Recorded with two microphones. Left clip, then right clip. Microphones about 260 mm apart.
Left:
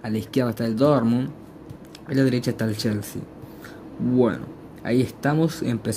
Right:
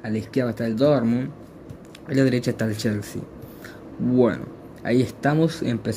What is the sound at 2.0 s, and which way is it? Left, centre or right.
Speech, centre.